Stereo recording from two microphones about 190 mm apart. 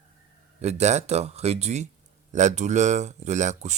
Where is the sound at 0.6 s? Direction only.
35° right (ahead or behind).